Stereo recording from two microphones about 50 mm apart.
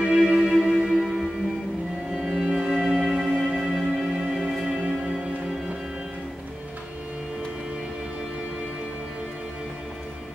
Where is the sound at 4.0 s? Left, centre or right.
Centre.